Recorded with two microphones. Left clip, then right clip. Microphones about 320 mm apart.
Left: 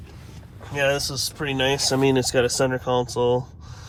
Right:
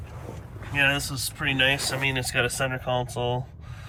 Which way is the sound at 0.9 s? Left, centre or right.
Centre.